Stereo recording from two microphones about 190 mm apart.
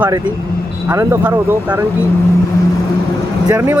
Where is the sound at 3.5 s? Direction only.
15° right (ahead or behind).